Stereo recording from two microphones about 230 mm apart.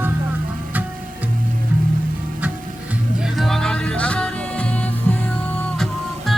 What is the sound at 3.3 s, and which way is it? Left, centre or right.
Music, centre.